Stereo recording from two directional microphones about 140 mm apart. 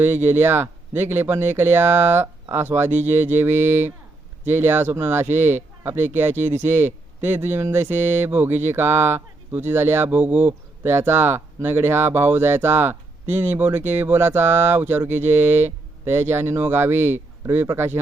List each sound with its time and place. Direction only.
0.0 s speech: 15° right (ahead or behind)